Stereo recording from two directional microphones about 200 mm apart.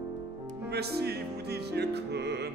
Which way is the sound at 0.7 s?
55° right (ahead or behind).